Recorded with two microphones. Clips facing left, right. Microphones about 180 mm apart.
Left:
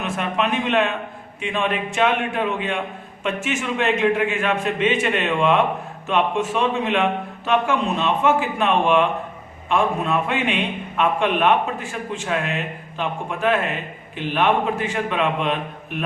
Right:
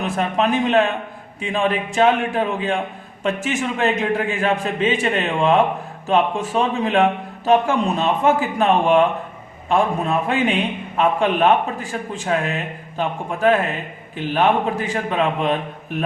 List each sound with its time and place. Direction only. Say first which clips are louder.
0.0 s a man's voice: right 3 dB; 35° right (ahead or behind)